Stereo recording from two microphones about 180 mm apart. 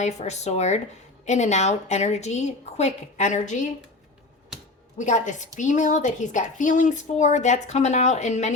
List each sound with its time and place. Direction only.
0.0 s a woman's voice: 40° left (ahead or behind)
4.9 s a woman's voice: 40° left (ahead or behind)